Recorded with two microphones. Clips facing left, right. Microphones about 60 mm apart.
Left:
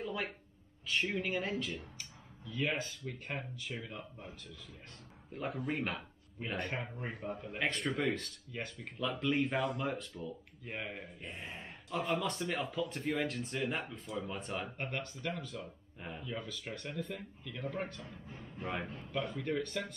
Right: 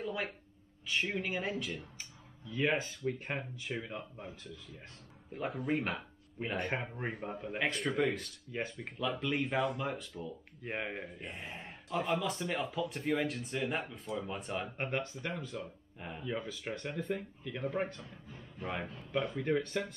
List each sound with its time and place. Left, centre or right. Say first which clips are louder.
0.0 s a sound: right 1 dB; centre
0.8 s speech: even; centre
2.0 s speech: even; centre
5.3 s speech: right 3 dB; centre; by 7.1 s right
7.1 s speech: right 2 dB; centre
8.5 s speech: right 6 dB; centre
9.2 s speech: left 1 dB; centre
10.6 s speech: right 5 dB; centre
11.2 s speech: right 1 dB; centre
14.8 s speech: right 4 dB; centre
15.6 s speech: right 1 dB; centre
16.3 s speech: right 5 dB; centre
18.6 s speech: even; centre
19.1 s speech: right 4 dB; centre